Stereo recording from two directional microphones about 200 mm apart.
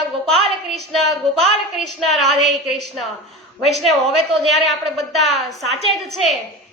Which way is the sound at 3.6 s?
Centre (ahead or behind).